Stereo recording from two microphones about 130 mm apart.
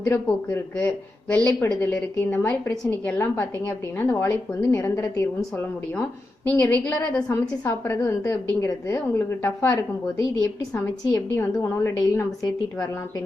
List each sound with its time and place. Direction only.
0.0 s a woman's voice: 20° left (ahead or behind)
6.0 s a woman's voice: 10° left (ahead or behind)